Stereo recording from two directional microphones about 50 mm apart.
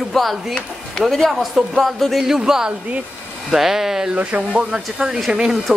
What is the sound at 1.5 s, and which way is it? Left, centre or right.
Speech, centre.